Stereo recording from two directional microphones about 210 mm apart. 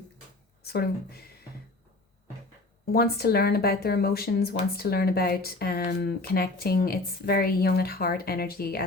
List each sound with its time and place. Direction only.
0.6 s speech: 50° left (ahead or behind)
2.9 s speech: 45° left (ahead or behind)